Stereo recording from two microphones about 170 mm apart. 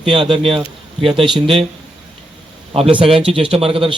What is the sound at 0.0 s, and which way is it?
Speech, 30° right (ahead or behind).